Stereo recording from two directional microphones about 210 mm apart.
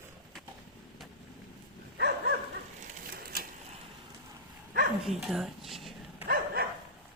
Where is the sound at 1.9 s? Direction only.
50° right (ahead or behind).